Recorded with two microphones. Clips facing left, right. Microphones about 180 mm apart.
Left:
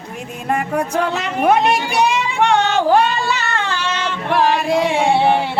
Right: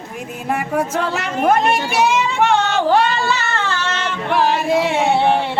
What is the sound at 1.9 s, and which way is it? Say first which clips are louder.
Music: right 1 dB; 5° right (ahead or behind).